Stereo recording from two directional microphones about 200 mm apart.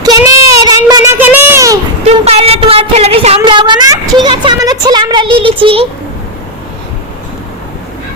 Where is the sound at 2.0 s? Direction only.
30° right (ahead or behind).